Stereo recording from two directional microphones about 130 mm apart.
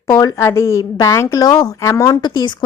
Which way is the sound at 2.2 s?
35° left (ahead or behind).